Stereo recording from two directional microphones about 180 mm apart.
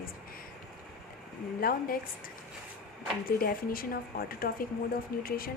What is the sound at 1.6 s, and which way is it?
Speech, 50° left (ahead or behind).